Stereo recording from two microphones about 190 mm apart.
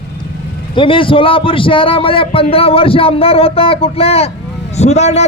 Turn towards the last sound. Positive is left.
turn(degrees=35)  # may be behind; listen again after turning